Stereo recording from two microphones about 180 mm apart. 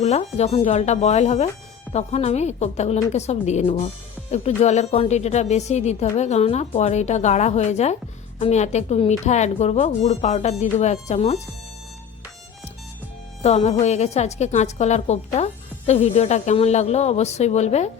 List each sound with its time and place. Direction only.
0.0 s a woman's voice: 35° left (ahead or behind)
13.4 s a woman's voice: 35° left (ahead or behind)